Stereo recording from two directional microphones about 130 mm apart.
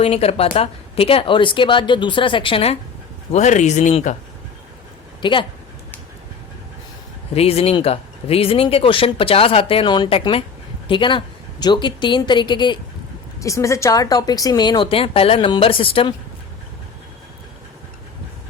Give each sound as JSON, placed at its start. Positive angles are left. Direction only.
{"t": 0.0, "sound": "speech", "side_deg": 50}
{"t": 3.3, "sound": "speech", "side_deg": 65}
{"t": 5.2, "sound": "speech", "side_deg": 40}
{"t": 7.3, "sound": "speech", "side_deg": 50}
{"t": 13.4, "sound": "speech", "side_deg": 25}